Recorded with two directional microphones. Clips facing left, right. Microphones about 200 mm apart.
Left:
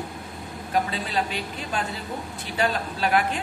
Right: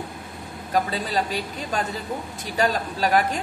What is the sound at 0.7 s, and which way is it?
A woman's voice, 40° right (ahead or behind).